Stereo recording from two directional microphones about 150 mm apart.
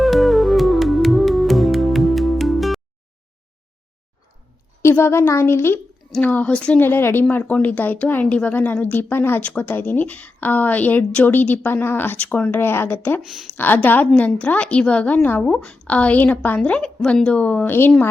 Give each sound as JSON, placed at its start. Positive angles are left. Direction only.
{"t": 0.0, "sound": "music", "side_deg": 0}
{"t": 4.8, "sound": "speech", "side_deg": 15}
{"t": 13.2, "sound": "a woman's voice", "side_deg": 0}
{"t": 13.6, "sound": "speech", "side_deg": 10}